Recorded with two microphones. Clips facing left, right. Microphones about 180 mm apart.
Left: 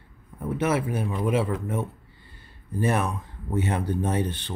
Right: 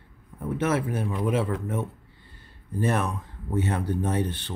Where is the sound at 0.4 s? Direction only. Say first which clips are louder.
Left 1 dB; 10° left (ahead or behind).